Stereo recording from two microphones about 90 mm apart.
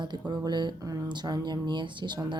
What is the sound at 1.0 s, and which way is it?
Speech, 55° right (ahead or behind).